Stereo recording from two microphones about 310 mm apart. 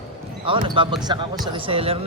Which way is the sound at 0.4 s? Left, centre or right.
Centre.